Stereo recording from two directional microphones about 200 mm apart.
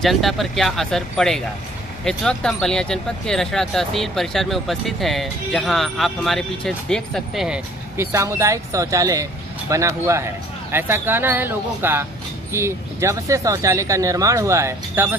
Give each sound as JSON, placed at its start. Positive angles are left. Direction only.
{"t": 0.0, "sound": "speech", "side_deg": 0}